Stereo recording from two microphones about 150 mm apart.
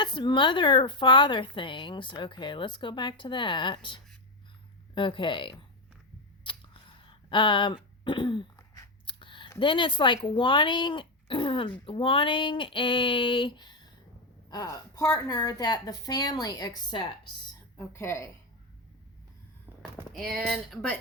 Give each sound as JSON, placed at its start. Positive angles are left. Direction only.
{"t": 0.0, "sound": "speech", "side_deg": 30}
{"t": 6.4, "sound": "a sound", "side_deg": 35}
{"t": 8.0, "sound": "speech", "side_deg": 35}
{"t": 8.5, "sound": "a sound", "side_deg": 20}
{"t": 10.2, "sound": "speech", "side_deg": 35}
{"t": 17.7, "sound": "speech", "side_deg": 20}
{"t": 20.1, "sound": "speech", "side_deg": 0}